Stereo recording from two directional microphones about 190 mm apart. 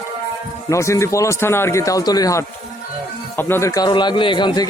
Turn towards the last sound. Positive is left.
turn(degrees=20)  # may be behind; listen again after turning